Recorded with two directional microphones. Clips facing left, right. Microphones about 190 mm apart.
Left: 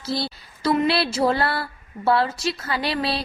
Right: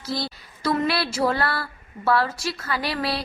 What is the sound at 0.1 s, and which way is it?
A woman's voice, 30° left (ahead or behind).